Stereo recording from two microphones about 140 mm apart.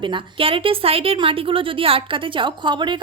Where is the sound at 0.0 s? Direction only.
35° right (ahead or behind).